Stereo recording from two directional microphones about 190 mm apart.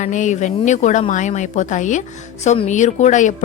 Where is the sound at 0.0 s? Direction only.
40° left (ahead or behind).